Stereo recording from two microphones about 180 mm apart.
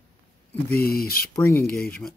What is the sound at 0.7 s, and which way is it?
Speech, 60° left (ahead or behind).